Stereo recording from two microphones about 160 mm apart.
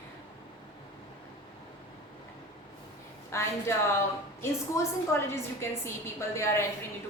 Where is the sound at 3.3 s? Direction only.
15° left (ahead or behind).